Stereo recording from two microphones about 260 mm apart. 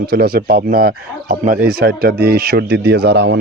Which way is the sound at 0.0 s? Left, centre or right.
Right.